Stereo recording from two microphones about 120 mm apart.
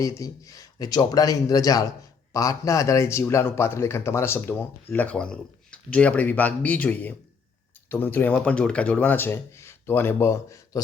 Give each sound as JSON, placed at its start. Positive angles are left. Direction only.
{"t": 0.0, "sound": "a man's voice", "side_deg": 25}